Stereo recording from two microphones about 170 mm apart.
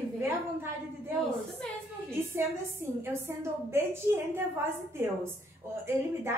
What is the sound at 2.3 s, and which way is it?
A woman's voice, 15° right (ahead or behind).